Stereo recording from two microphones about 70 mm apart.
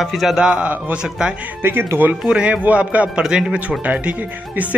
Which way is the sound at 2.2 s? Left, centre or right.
Centre.